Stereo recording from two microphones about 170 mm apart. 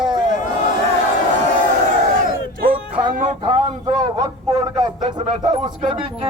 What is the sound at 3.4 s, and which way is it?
Speech, 30° right (ahead or behind).